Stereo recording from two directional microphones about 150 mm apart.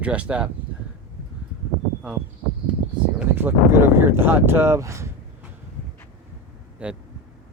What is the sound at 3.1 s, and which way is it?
Speech, 15° right (ahead or behind).